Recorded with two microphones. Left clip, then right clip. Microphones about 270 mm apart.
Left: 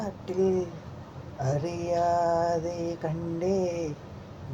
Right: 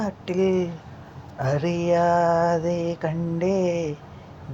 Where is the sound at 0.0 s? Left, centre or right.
Right.